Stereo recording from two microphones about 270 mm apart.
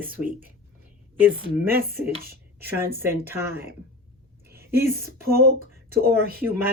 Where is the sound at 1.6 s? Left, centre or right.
Right.